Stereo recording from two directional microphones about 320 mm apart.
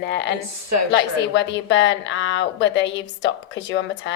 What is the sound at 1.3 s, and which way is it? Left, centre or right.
A woman's voice, left.